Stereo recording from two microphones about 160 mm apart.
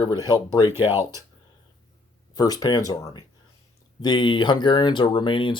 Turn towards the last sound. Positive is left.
turn(degrees=30)  # may be behind; listen again after turning